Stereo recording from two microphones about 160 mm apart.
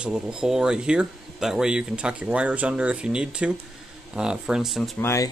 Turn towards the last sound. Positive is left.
turn(degrees=20)  # may be behind; listen again after turning